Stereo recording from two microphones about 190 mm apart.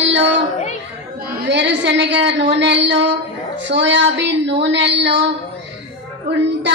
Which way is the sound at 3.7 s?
70° right (ahead or behind).